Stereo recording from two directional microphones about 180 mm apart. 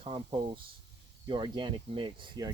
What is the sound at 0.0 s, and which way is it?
Speech, 30° right (ahead or behind).